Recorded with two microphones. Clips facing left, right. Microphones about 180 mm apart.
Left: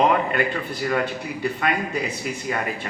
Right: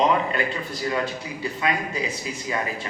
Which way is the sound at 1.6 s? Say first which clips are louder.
Right 1 dB; 60° left (ahead or behind).